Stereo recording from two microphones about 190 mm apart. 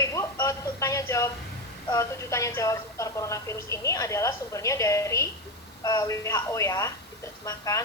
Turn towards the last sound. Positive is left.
turn(degrees=15)  # may be behind; listen again after turning